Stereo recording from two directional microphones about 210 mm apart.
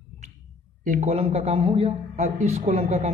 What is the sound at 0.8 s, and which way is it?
A man's voice, 35° right (ahead or behind).